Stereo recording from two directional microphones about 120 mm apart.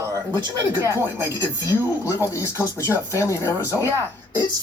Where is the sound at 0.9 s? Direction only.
25° left (ahead or behind).